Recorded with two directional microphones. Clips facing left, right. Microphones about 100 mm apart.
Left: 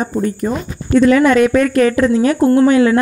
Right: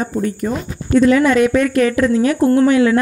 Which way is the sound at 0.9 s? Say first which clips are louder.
Left 2 dB; 75° left (ahead or behind).